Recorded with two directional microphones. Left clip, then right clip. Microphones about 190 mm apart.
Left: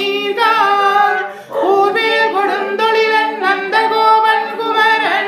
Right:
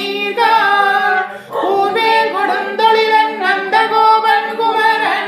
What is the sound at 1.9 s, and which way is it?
A capella, 10° left (ahead or behind).